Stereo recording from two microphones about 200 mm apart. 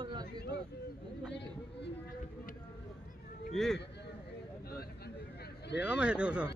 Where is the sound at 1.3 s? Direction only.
60° left (ahead or behind).